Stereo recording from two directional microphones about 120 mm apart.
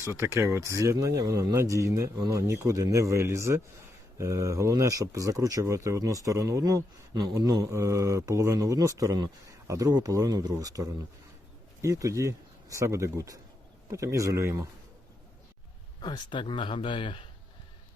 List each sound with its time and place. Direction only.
0.1 s speech: 20° right (ahead or behind)
16.0 s speech: 40° left (ahead or behind)